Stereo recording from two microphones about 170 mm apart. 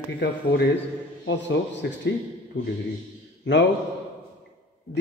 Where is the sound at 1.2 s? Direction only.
90° left.